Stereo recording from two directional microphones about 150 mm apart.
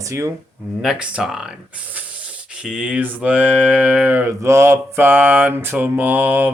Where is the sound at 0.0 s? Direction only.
20° right (ahead or behind).